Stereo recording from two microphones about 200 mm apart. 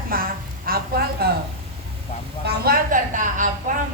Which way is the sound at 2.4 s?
50° right (ahead or behind).